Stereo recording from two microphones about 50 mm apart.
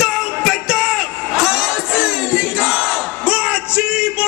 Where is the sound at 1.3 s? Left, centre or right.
Centre.